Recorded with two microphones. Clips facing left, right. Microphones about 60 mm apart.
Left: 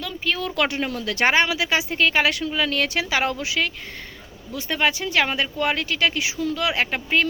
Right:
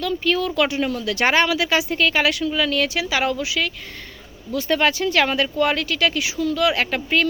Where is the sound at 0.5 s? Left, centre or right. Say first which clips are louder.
Right 3 dB; left.